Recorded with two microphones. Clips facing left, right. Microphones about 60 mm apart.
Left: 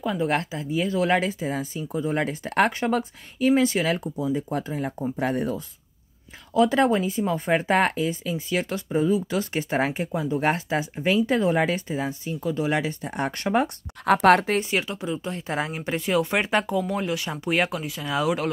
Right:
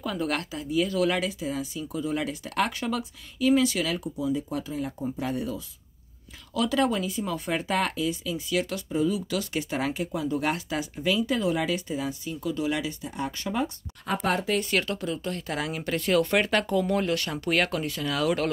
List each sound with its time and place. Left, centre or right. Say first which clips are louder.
0.0 s speech: left 5 dB; left
6.5 s speech: left 5 dB; left
13.1 s speech: left 8 dB; left
14.0 s speech: left 10 dB; left
14.6 s speech: left 1 dB; centre